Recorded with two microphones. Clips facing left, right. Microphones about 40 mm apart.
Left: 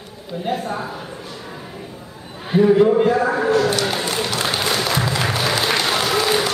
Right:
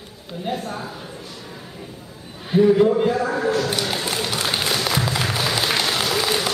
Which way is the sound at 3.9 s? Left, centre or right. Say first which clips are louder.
Left 2 dB; centre.